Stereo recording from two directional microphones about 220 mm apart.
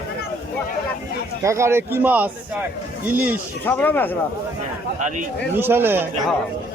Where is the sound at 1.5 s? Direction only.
10° right (ahead or behind).